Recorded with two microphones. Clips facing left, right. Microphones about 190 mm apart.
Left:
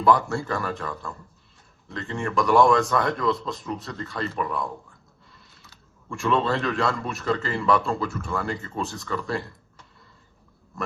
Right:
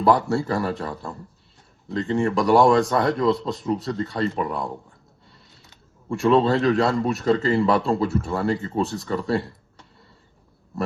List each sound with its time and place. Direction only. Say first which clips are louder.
0.0 s speech: right 2 dB; 35° right (ahead or behind)